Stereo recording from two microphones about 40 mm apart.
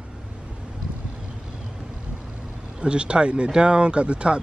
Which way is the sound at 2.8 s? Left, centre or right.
Right.